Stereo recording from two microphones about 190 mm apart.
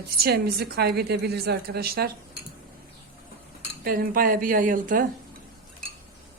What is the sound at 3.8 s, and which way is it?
A woman's voice, 50° right (ahead or behind).